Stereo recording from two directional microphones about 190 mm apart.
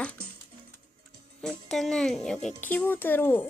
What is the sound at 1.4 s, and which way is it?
A child's voice, centre (ahead or behind).